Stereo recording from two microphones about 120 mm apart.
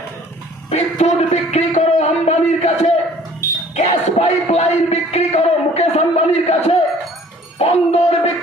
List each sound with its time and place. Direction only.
0.7 s speech: 65° left (ahead or behind)
3.7 s music: 70° left (ahead or behind)